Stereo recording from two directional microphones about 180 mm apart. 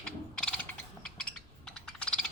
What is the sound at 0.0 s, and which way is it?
Mechanisms, 5° left (ahead or behind).